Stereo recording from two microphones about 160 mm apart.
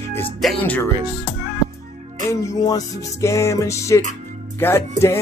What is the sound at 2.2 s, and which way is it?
Music, 20° left (ahead or behind).